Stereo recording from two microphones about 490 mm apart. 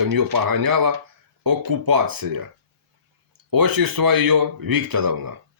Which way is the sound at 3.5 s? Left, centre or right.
Right.